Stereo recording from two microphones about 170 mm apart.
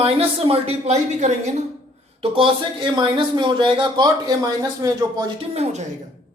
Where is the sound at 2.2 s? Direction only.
30° right (ahead or behind).